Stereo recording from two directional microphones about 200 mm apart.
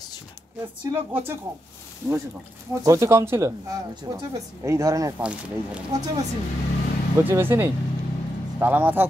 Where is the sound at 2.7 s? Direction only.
15° right (ahead or behind).